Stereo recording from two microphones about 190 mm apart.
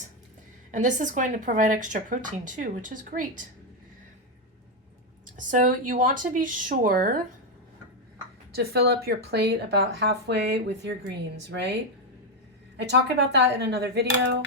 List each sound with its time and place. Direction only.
0.7 s a woman's voice: 40° right (ahead or behind)
5.4 s speech: 45° right (ahead or behind)
8.5 s speech: 60° right (ahead or behind)